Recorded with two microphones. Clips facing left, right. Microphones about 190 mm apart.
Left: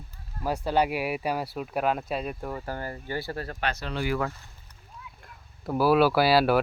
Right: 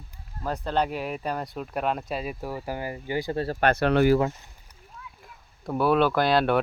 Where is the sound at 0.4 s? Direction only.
10° left (ahead or behind); by 3.3 s 15° right (ahead or behind).